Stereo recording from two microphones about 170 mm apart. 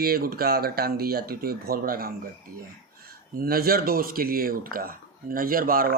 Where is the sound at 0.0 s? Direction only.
60° right (ahead or behind).